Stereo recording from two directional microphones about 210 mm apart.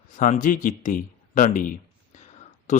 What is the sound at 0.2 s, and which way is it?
Speech, 40° left (ahead or behind).